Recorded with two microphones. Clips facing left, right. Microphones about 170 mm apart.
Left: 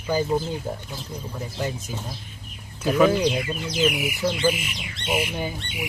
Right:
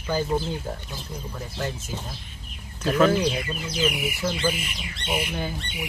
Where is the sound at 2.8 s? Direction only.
5° left (ahead or behind).